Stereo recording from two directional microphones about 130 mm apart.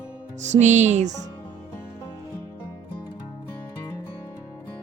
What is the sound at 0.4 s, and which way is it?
Music, 65° right (ahead or behind).